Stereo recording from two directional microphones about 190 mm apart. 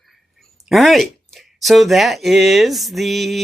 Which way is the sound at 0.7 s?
Centre (ahead or behind).